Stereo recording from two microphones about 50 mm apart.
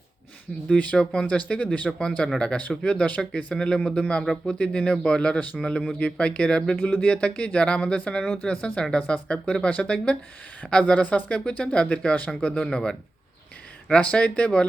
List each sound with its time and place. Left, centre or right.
0.7 s speech: left
0.9 s speech: centre
1.4 s speech: left
1.9 s speech: centre
13.9 s speech: left